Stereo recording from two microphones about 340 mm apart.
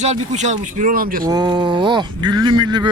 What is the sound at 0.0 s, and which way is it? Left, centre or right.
Speech, centre.